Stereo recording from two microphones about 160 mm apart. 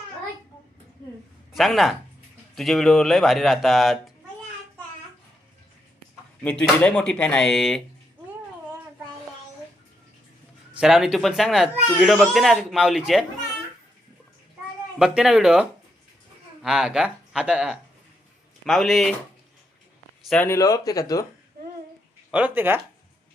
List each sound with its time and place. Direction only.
1.5 s speech: centre (ahead or behind)
6.4 s speech: 10° left (ahead or behind)
10.8 s speech: 5° right (ahead or behind)
14.9 s speech: 5° right (ahead or behind)
16.6 s speech: 5° right (ahead or behind)
20.2 s speech: 5° left (ahead or behind)
20.5 s speech: 20° left (ahead or behind)
22.3 s speech: 10° right (ahead or behind)